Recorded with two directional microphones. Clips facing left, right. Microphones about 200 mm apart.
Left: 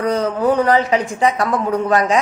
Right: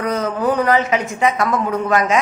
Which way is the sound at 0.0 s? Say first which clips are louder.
Left 2 dB; 30° left (ahead or behind).